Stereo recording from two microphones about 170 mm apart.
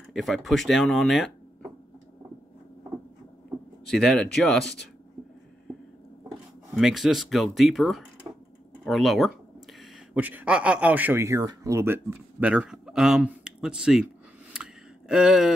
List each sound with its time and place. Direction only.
0.1 s speech: centre (ahead or behind)
3.8 s speech: 5° left (ahead or behind)
6.7 s speech: centre (ahead or behind)
8.3 s typing: 20° right (ahead or behind)
8.8 s speech: centre (ahead or behind)
14.5 s a sound: 5° right (ahead or behind)